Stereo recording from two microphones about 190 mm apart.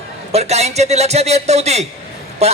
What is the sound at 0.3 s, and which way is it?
A man's voice, 35° right (ahead or behind).